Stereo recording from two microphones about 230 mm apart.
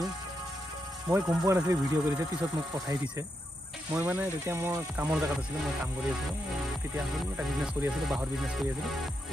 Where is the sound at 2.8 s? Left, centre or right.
Centre.